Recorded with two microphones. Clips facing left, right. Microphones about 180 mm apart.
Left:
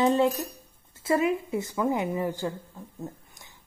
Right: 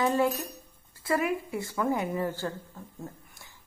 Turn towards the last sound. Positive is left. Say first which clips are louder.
# left 3 dB
turn(degrees=20)  # may be behind; listen again after turning